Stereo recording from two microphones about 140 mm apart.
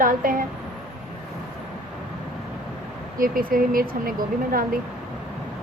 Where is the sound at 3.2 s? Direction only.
90° right.